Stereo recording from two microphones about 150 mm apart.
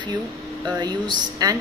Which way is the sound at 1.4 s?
25° right (ahead or behind).